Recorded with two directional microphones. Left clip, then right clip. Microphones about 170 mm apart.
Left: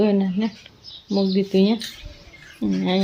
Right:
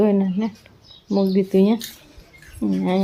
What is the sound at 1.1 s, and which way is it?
Speech, 15° right (ahead or behind).